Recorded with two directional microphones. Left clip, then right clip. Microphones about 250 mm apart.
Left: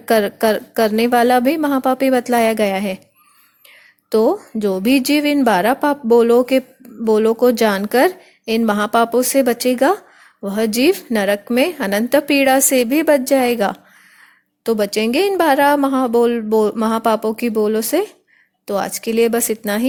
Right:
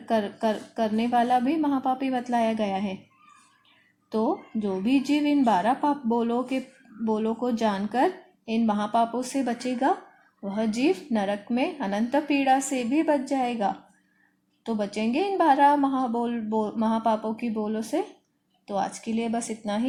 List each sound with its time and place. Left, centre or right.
0.1 s a woman's voice: left
4.1 s a woman's voice: left